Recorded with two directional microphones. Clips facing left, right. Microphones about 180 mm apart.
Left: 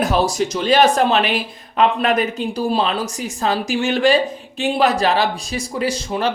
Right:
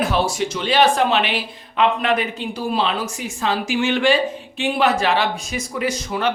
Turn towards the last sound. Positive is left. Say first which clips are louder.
# left 1 dB
turn(degrees=30)  # may be behind; listen again after turning